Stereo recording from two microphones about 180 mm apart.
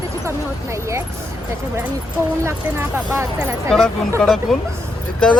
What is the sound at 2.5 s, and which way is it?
Speech, 15° right (ahead or behind).